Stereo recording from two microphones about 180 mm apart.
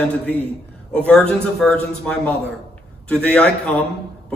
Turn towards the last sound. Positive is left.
turn(degrees=10)  # may be behind; listen again after turning